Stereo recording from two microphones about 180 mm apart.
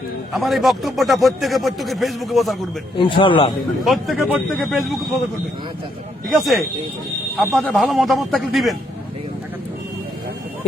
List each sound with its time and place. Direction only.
0.3 s a man's voice: centre (ahead or behind)
3.0 s a man's voice: 25° left (ahead or behind)
3.8 s a man's voice: centre (ahead or behind)
6.2 s a man's voice: centre (ahead or behind)